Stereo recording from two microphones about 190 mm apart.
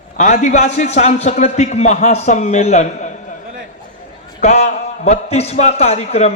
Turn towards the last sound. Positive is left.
turn(degrees=35)  # may be behind; listen again after turning